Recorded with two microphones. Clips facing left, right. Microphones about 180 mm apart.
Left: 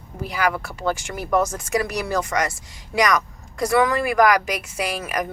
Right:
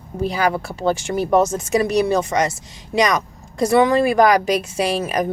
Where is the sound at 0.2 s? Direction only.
30° right (ahead or behind).